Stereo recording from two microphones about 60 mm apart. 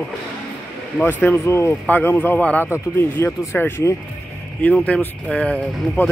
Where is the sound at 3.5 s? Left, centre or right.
Left.